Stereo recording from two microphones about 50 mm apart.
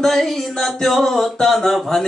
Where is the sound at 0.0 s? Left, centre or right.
Centre.